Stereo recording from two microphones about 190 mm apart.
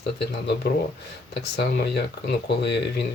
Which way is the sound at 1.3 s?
60° left (ahead or behind).